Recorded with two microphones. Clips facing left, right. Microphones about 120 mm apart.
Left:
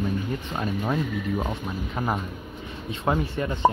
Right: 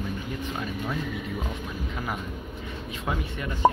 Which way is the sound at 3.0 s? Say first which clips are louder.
Left 7 dB; 35° left (ahead or behind).